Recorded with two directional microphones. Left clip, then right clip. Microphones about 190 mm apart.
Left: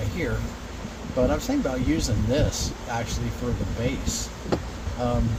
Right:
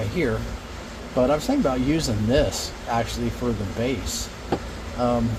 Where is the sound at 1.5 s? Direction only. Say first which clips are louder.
Right 3 dB; 50° right (ahead or behind).